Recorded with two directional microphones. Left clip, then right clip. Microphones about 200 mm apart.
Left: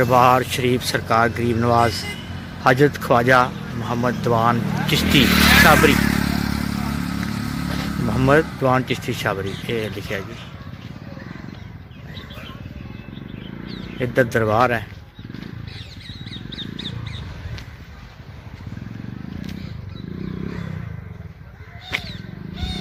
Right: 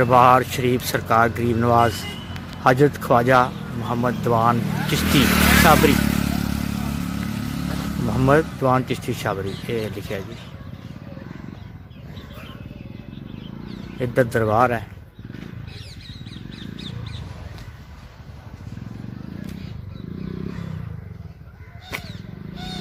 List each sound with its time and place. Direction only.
0.0 s speech: centre (ahead or behind)
4.6 s speech: 15° right (ahead or behind)
5.0 s speech: 40° right (ahead or behind)
5.6 s speech: centre (ahead or behind)
5.9 s vehicle: 35° right (ahead or behind); by 7.5 s 15° right (ahead or behind)
7.7 s speech: centre (ahead or behind)
14.0 s speech: 5° right (ahead or behind)
16.6 s wild animals: 55° right (ahead or behind)
22.5 s a sound: 35° right (ahead or behind)